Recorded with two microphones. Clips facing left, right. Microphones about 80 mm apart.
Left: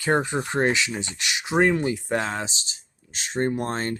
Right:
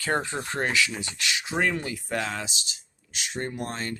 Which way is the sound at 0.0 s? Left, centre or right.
Centre.